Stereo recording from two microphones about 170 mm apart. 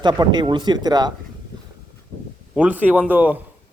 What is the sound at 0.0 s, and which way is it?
Speech, 25° right (ahead or behind).